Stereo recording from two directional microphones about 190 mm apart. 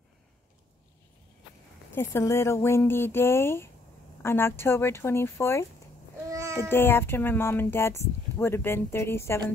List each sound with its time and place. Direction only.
1.9 s speech: 15° left (ahead or behind)
6.3 s a sound: 15° right (ahead or behind)
6.7 s speech: 10° left (ahead or behind)